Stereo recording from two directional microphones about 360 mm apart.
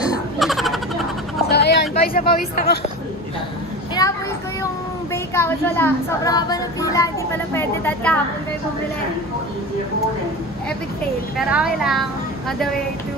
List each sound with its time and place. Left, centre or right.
0.4 s a sound: centre
1.5 s speech: left
4.0 s child singing: centre
5.1 s a woman's voice: centre
11.3 s a woman's voice: centre